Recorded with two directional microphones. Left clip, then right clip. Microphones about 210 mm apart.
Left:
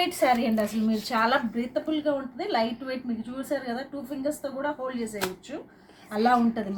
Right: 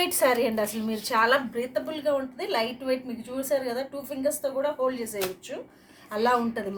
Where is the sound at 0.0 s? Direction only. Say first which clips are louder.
Even; 55° right (ahead or behind).